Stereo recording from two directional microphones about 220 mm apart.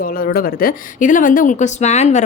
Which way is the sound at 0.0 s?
40° left (ahead or behind).